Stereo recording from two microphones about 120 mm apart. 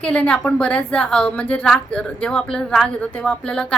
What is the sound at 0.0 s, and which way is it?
Speech, 10° left (ahead or behind).